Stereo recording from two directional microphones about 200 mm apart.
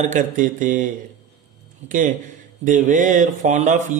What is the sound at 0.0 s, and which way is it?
Speech, 40° right (ahead or behind).